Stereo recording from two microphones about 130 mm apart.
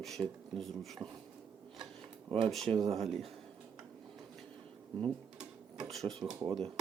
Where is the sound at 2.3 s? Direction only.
40° right (ahead or behind).